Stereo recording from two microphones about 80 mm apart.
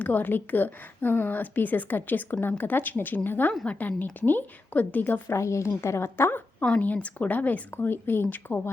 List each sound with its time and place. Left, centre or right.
0.0 s a woman's voice: left
5.3 s a woman's voice: left
6.6 s a woman's voice: centre